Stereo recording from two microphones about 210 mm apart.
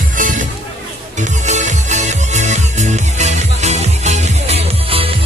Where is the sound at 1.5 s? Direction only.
35° right (ahead or behind).